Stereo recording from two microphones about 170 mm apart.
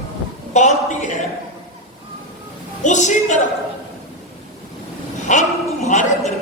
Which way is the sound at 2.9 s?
45° left (ahead or behind).